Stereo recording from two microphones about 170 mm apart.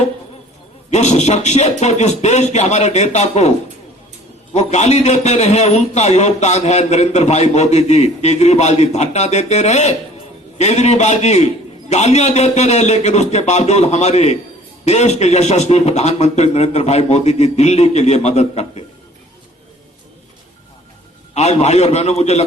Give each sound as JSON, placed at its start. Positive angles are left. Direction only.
{"t": 0.9, "sound": "a man's voice", "side_deg": 40}
{"t": 4.5, "sound": "a man's voice", "side_deg": 40}
{"t": 21.3, "sound": "a man's voice", "side_deg": 40}